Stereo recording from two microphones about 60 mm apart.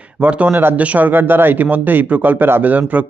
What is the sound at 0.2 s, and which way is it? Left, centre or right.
Speech, right.